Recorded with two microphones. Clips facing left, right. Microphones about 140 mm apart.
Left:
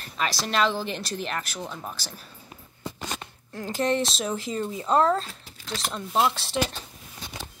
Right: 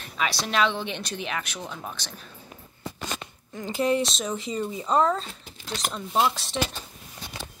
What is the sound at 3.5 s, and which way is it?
Speech, centre (ahead or behind).